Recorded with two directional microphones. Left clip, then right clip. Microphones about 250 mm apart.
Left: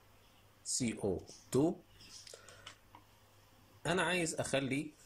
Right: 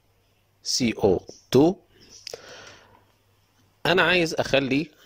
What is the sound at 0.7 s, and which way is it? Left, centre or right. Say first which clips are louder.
Speech: right 16 dB; right.